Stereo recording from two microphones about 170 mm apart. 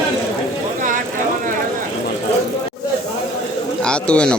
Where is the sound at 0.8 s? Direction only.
50° right (ahead or behind).